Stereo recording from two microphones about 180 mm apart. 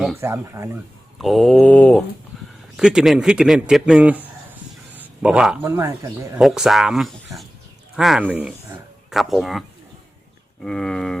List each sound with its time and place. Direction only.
0.2 s speech: 15° right (ahead or behind)
1.2 s speech: centre (ahead or behind)
2.3 s a sound: centre (ahead or behind)
2.7 s speech: 5° right (ahead or behind)
4.9 s a sound: 5° right (ahead or behind)
5.6 s speech: 15° right (ahead or behind)
6.4 s speech: centre (ahead or behind)